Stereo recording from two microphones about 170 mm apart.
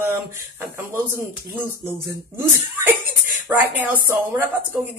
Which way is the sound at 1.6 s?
10° right (ahead or behind).